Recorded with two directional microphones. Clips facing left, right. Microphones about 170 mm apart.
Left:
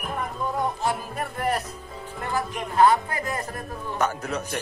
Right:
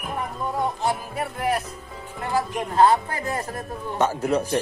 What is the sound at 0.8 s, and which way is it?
Music, 5° right (ahead or behind).